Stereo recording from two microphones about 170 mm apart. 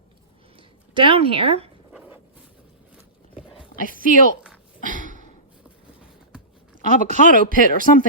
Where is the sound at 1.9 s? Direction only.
10° right (ahead or behind).